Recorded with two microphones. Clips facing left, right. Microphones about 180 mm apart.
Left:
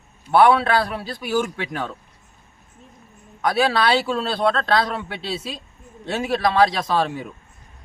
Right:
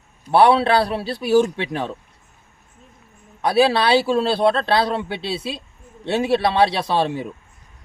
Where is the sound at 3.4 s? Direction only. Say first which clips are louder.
Right 3 dB; 30° right (ahead or behind).